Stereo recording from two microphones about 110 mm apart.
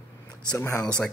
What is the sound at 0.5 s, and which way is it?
Speech, 25° left (ahead or behind).